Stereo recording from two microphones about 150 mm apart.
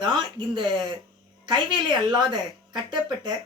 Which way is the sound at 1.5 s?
30° right (ahead or behind).